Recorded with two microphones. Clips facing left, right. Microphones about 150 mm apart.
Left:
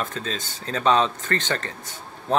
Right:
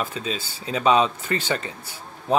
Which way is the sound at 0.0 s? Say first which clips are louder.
Right 1 dB; 10° right (ahead or behind).